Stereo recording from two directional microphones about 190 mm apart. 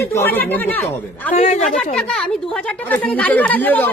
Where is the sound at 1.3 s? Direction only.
40° left (ahead or behind).